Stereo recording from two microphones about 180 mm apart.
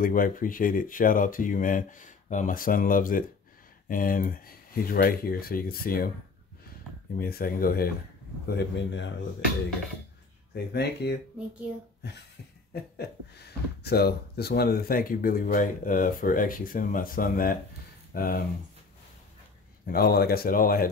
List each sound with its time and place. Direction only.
0.0 s speech: 50° left (ahead or behind)
7.2 s speech: 55° left (ahead or behind)
8.5 s speech: 80° left
10.5 s speech: 65° left (ahead or behind)
12.9 s speech: 65° left (ahead or behind)
19.9 s speech: 60° left (ahead or behind)